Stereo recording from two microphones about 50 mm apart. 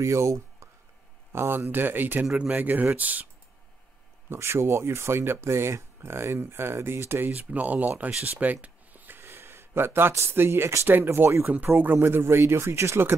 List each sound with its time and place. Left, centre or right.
0.0 s speech: right
1.3 s speech: right
2.3 s speech: right
4.3 s speech: right
7.2 s speech: right
8.2 s a sound: right
10.1 s speech: right
11.4 s speech: right
12.0 s speech: right